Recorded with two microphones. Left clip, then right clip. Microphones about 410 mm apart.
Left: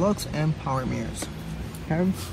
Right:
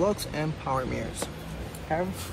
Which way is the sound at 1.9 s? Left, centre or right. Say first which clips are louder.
Even; left.